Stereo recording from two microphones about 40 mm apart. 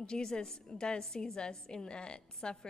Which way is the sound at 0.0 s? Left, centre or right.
Centre.